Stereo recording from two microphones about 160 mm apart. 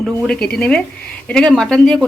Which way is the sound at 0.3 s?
5° left (ahead or behind).